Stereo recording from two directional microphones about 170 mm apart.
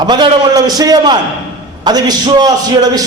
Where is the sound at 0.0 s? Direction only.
25° right (ahead or behind).